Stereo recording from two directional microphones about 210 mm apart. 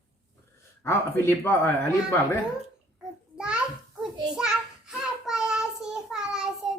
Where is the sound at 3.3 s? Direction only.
5° right (ahead or behind).